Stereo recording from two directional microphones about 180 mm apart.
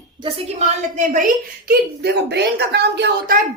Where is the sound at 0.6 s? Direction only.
35° right (ahead or behind).